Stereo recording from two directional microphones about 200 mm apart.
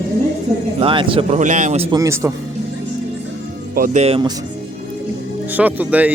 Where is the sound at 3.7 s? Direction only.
40° right (ahead or behind).